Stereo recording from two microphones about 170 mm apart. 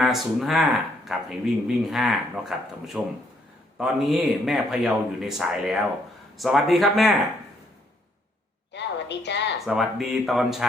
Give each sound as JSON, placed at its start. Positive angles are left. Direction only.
{"t": 0.0, "sound": "a man's voice", "side_deg": 0}
{"t": 8.7, "sound": "a sound", "side_deg": 90}
{"t": 9.6, "sound": "a man's voice", "side_deg": 0}